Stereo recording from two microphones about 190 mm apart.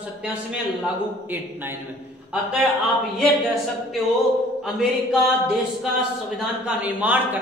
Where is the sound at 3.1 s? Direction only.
Centre (ahead or behind).